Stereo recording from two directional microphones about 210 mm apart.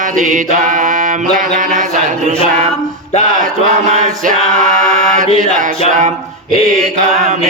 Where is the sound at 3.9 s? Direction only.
35° right (ahead or behind).